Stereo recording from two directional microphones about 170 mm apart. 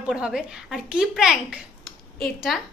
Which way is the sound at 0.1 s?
5° right (ahead or behind).